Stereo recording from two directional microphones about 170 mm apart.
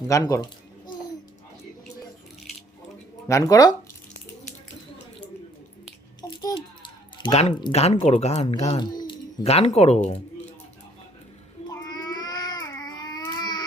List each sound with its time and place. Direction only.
0.1 s speech: 20° left (ahead or behind)
3.2 s speech: 20° left (ahead or behind)
6.2 s babbling: 25° left (ahead or behind)
8.0 s speech: 40° left (ahead or behind)
8.8 s a sound: 25° left (ahead or behind)
9.4 s speech: 40° left (ahead or behind)
11.7 s baby cry: 25° left (ahead or behind)